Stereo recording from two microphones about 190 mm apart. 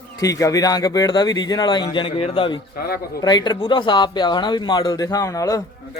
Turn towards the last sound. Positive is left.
turn(degrees=20)  # may be behind; listen again after turning